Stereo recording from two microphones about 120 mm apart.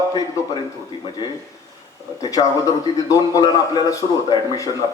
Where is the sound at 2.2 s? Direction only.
30° left (ahead or behind).